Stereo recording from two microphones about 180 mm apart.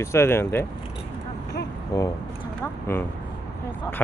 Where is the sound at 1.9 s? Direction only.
20° left (ahead or behind).